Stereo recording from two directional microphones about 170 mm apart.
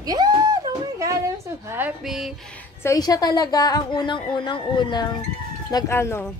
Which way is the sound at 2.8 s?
20° left (ahead or behind).